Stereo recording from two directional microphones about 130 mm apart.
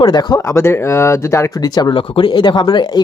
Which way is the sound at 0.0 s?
35° left (ahead or behind).